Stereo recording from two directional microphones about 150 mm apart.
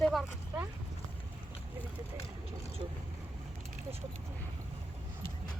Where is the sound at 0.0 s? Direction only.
Centre (ahead or behind).